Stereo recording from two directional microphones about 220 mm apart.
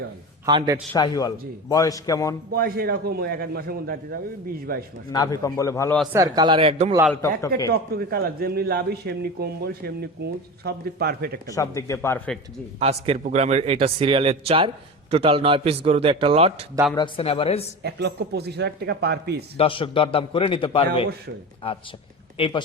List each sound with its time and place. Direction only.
0.4 s a man's voice: 20° right (ahead or behind)
0.9 s speech: 20° left (ahead or behind)
2.5 s a man's voice: 45° right (ahead or behind)
5.1 s speech: 15° left (ahead or behind)
6.1 s a man's voice: 15° right (ahead or behind)
7.1 s speech: 15° left (ahead or behind)
7.7 s a man's voice: 45° right (ahead or behind)
11.4 s speech: 15° left (ahead or behind)
12.8 s a man's voice: 30° right (ahead or behind)
16.9 s a man's voice: 20° left (ahead or behind)
17.8 s a man's voice: 45° right (ahead or behind)
19.5 s a man's voice: 25° left (ahead or behind)